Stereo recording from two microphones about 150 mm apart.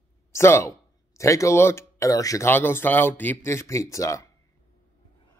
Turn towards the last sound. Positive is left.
turn(degrees=20)  # may be behind; listen again after turning